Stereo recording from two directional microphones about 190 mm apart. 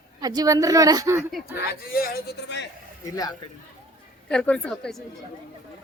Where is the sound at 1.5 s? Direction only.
55° left (ahead or behind).